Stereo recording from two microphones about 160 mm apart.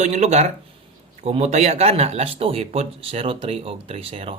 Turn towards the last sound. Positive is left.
turn(degrees=-35)  # may be behind; listen again after turning